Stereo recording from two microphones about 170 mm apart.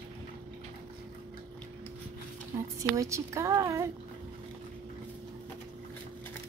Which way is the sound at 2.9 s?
20° right (ahead or behind).